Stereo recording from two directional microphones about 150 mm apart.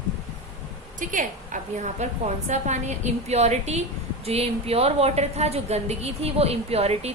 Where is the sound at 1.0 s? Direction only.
60° right (ahead or behind).